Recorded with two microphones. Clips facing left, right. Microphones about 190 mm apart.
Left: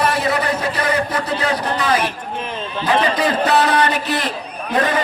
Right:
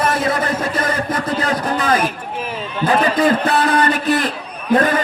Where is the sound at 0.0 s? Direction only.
50° right (ahead or behind).